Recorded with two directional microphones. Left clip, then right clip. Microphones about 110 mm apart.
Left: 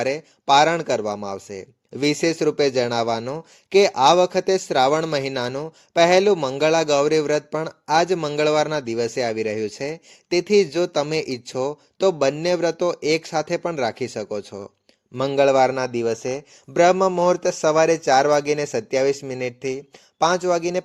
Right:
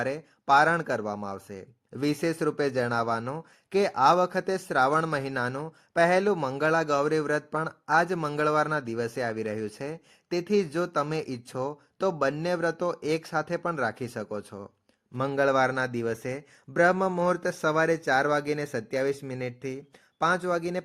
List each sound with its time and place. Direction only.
0.0 s speech: 20° left (ahead or behind)
16.7 s speech: 20° left (ahead or behind)
17.1 s speech: 5° left (ahead or behind)